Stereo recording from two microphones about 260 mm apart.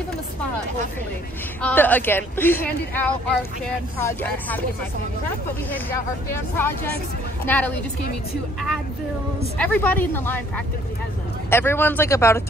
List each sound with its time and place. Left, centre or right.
1.6 s a woman's voice: centre
5.7 s a woman's voice: centre
9.6 s a woman's voice: centre
11.5 s a woman's voice: centre